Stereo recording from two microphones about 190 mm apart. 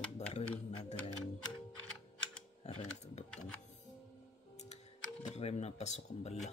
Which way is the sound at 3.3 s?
5° left (ahead or behind).